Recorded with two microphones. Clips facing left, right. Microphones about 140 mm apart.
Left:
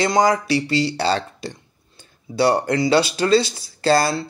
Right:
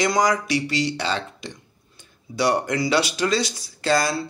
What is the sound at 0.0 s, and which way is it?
Speech, 30° left (ahead or behind).